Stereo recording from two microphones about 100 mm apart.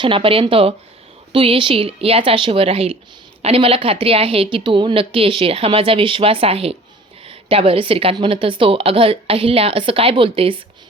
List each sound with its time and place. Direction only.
0.0 s a woman's voice: 60° right (ahead or behind); by 6.7 s 85° right
7.3 s a woman's voice: 70° right (ahead or behind)